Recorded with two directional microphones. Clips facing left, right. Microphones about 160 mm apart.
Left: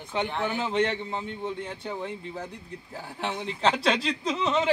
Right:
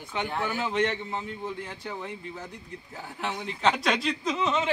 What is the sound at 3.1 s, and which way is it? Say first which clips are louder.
A man's voice: left 1 dB; 30° left (ahead or behind).